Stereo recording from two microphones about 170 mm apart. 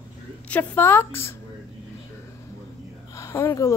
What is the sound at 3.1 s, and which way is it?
Speech, 15° left (ahead or behind).